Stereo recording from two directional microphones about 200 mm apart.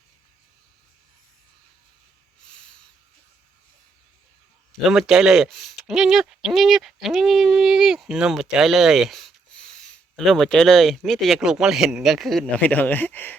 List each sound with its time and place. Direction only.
4.9 s speech: centre (ahead or behind)